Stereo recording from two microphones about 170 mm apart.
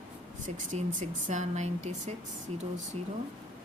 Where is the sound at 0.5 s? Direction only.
45° right (ahead or behind).